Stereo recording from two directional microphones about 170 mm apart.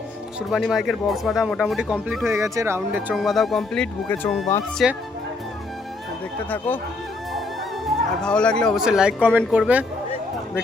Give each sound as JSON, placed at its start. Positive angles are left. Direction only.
{"t": 0.3, "sound": "speech", "side_deg": 0}
{"t": 2.2, "sound": "speech", "side_deg": -15}
{"t": 3.2, "sound": "speech", "side_deg": 0}
{"t": 6.7, "sound": "speech", "side_deg": 10}
{"t": 7.9, "sound": "speech", "side_deg": 5}